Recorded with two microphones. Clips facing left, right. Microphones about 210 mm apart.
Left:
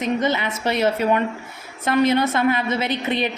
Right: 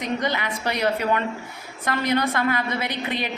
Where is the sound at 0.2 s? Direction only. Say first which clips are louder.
Left 4 dB; 20° left (ahead or behind).